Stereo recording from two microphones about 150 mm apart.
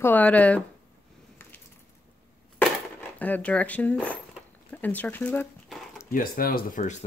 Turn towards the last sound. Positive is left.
turn(degrees=60)  # may be behind; listen again after turning